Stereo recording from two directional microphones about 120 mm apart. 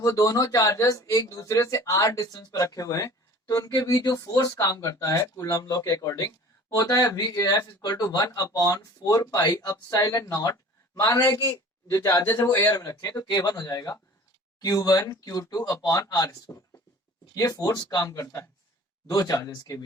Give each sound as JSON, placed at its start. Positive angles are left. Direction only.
{"t": 0.0, "sound": "speech", "side_deg": 30}
{"t": 12.7, "sound": "speech", "side_deg": 30}